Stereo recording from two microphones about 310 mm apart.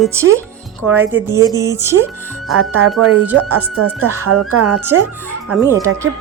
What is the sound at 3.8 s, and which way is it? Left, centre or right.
Speech, right.